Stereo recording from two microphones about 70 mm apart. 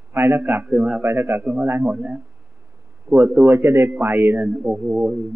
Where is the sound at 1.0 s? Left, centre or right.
Right.